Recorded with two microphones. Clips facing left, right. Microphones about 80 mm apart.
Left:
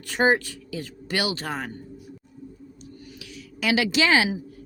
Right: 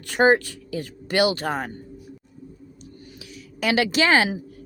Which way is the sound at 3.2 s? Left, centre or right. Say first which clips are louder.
Right 3 dB; right.